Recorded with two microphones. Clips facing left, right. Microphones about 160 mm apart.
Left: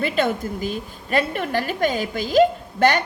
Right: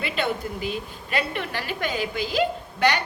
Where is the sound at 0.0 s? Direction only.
45° left (ahead or behind).